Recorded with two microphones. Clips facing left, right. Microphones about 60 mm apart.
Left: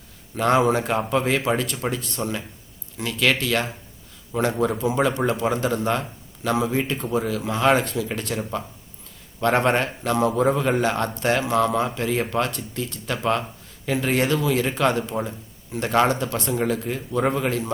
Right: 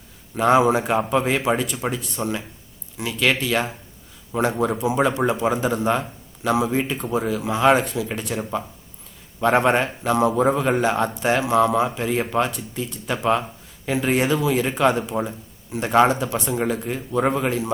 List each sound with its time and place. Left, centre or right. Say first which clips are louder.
0.3 s a man's voice: right 2 dB; centre